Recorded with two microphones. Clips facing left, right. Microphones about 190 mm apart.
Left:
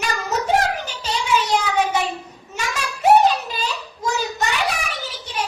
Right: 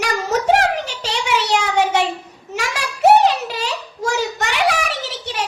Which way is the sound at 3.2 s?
80° right.